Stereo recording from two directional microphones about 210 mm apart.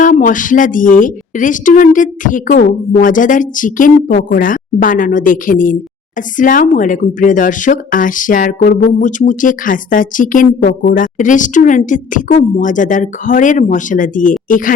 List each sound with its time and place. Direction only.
0.0 s speech: 40° left (ahead or behind)